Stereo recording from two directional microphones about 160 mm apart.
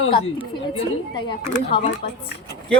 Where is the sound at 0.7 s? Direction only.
30° left (ahead or behind).